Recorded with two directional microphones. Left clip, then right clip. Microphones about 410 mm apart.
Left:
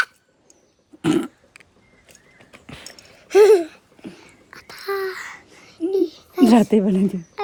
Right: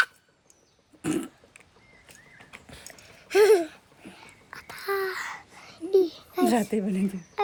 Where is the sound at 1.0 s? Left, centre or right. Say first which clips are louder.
Left 9 dB; left.